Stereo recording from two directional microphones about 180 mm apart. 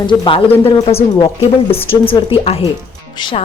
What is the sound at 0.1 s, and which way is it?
A woman's voice, 30° left (ahead or behind).